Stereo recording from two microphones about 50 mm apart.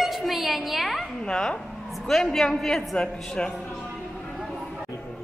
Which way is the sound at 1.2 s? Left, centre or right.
Centre.